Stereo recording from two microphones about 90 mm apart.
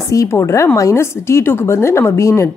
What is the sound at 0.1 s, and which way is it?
Speech, 35° left (ahead or behind).